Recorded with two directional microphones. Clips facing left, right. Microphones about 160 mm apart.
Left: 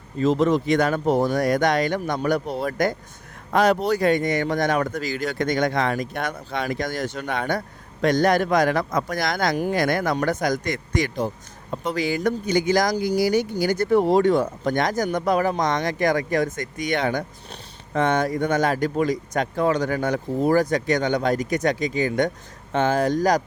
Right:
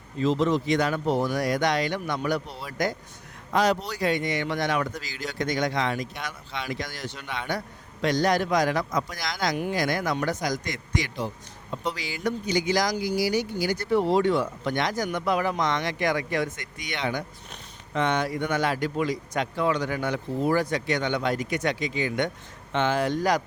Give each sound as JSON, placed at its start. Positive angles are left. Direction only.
{"t": 0.2, "sound": "a man's voice", "side_deg": 50}